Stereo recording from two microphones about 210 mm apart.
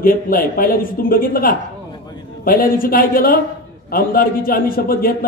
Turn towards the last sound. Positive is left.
turn(degrees=45)  # may be behind; listen again after turning